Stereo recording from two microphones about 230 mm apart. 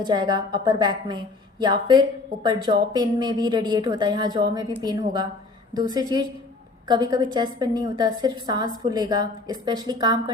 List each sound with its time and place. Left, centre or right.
0.0 s a woman's voice: centre